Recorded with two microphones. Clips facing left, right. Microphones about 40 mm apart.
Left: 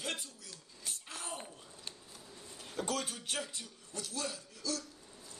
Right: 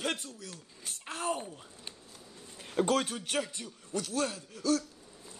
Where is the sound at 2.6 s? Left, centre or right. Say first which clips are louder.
Right 9 dB; right.